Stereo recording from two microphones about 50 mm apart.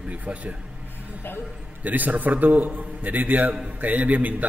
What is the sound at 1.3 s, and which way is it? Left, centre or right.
Speech, left.